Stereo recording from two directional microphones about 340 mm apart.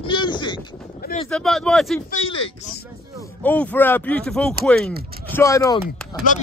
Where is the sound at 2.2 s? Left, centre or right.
Centre.